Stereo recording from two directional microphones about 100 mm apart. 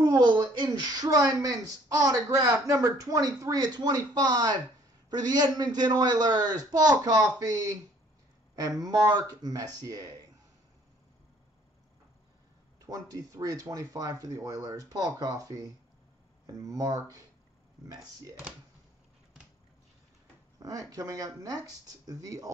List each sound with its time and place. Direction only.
0.0 s a sound: 45° right (ahead or behind)
0.4 s speech: 45° right (ahead or behind)
12.8 s speech: 35° right (ahead or behind)
20.5 s speech: 35° right (ahead or behind)